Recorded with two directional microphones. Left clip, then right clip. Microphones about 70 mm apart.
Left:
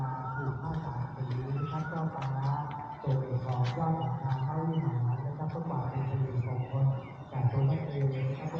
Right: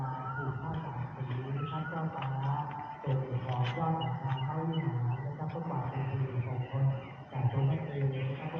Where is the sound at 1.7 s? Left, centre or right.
Left.